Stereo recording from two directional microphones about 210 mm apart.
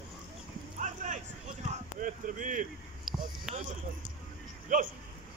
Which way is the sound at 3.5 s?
5° right (ahead or behind).